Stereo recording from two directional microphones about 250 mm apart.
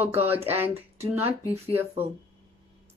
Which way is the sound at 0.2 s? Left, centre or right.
Right.